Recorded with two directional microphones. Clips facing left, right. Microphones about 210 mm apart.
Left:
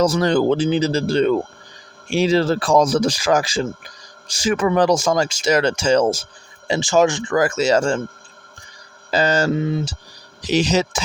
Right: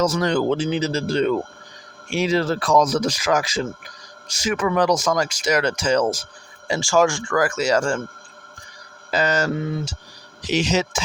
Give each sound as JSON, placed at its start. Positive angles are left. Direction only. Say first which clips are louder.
{"t": 0.0, "sound": "speech", "louder": "left 3 dB", "side_deg": 35}
{"t": 9.0, "sound": "speech", "louder": "left 3 dB", "side_deg": 30}
{"t": 10.4, "sound": "speech", "louder": "left 3 dB", "side_deg": 35}